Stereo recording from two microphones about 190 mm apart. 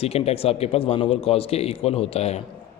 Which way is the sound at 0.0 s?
30° left (ahead or behind).